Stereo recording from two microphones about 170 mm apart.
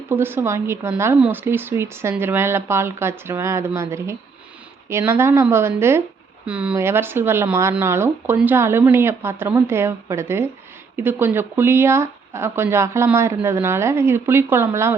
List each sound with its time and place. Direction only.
0.1 s speech: 15° right (ahead or behind)